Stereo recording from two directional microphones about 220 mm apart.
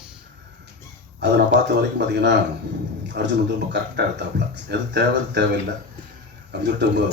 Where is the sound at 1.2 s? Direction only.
50° right (ahead or behind).